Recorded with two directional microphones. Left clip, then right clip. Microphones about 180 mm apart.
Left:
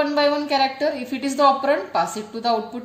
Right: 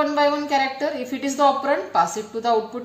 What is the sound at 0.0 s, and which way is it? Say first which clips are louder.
A woman's voice: even; 45° left (ahead or behind).